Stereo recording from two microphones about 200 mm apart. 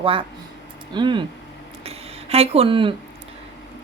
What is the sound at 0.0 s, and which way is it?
A woman's voice, 25° right (ahead or behind).